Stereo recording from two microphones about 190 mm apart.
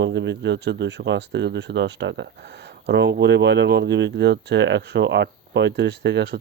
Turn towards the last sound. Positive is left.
turn(degrees=-60)  # may be behind; listen again after turning